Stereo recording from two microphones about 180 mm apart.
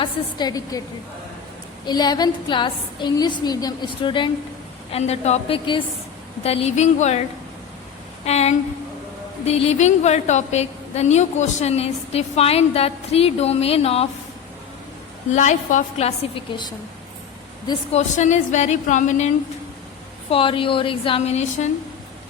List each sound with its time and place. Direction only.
0.0 s a woman's voice: 25° left (ahead or behind)
1.9 s a woman's voice: 20° left (ahead or behind); by 7.2 s 40° left (ahead or behind)
8.2 s a woman's voice: 35° left (ahead or behind)
15.3 s a woman's voice: 45° left (ahead or behind)
17.9 s a woman's voice: 40° left (ahead or behind)
20.3 s a woman's voice: 30° left (ahead or behind)